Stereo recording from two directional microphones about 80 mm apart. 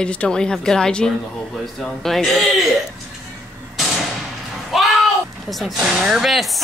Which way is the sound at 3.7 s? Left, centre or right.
Centre.